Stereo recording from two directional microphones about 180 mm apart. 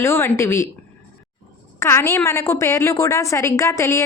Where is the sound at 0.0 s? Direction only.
15° left (ahead or behind).